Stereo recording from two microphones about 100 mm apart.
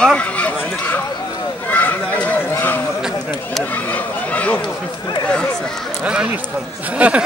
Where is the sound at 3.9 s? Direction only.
15° left (ahead or behind).